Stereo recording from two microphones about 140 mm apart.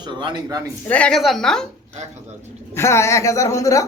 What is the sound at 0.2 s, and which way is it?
Speech, 35° right (ahead or behind).